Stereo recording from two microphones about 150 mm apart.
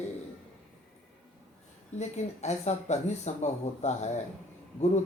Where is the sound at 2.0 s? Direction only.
50° left (ahead or behind).